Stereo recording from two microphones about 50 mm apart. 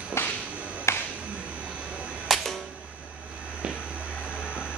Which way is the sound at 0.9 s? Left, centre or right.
Left.